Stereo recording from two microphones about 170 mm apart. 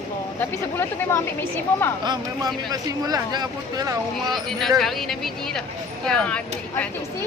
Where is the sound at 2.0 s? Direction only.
25° right (ahead or behind).